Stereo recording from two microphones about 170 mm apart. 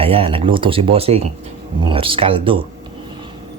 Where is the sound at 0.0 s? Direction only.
35° right (ahead or behind).